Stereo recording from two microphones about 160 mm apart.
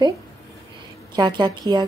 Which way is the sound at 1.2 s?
30° right (ahead or behind).